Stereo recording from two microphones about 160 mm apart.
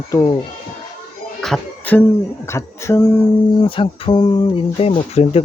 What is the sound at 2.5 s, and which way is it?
Speech, 15° left (ahead or behind).